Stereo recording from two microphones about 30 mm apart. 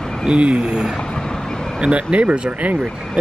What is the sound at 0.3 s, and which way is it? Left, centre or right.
Speech, right.